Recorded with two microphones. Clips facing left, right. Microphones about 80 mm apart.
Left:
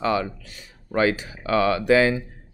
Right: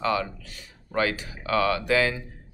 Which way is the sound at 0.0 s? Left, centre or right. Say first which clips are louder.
Left 3 dB; left.